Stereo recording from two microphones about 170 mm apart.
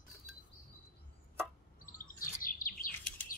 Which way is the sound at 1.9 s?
55° left (ahead or behind).